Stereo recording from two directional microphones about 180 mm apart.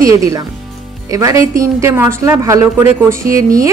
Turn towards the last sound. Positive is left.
turn(degrees=-15)  # may be behind; listen again after turning